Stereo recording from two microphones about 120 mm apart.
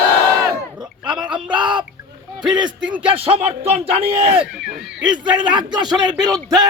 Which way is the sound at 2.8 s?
10° right (ahead or behind).